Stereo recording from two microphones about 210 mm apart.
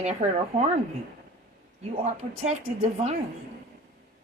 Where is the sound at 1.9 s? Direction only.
30° right (ahead or behind).